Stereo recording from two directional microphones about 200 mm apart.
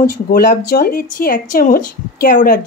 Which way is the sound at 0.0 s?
45° left (ahead or behind).